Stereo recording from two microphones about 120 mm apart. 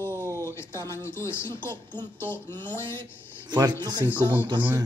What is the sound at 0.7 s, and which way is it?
Speech, 20° left (ahead or behind).